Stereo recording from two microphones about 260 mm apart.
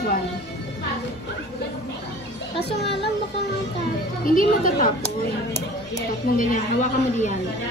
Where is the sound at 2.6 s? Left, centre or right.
Left.